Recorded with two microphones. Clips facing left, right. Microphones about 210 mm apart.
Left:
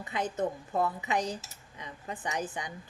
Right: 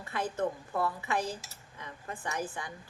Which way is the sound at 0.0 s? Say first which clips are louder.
Left 1 dB; 20° left (ahead or behind).